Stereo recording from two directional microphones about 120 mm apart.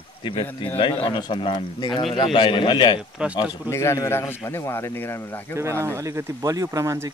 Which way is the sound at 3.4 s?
25° left (ahead or behind).